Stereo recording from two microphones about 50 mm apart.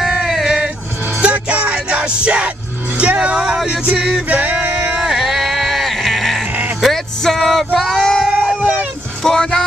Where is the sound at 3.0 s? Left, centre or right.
Right.